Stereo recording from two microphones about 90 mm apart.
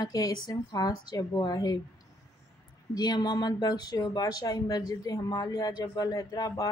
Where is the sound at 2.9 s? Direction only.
50° left (ahead or behind).